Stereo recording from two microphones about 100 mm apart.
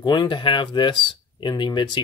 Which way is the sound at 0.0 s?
50° left (ahead or behind).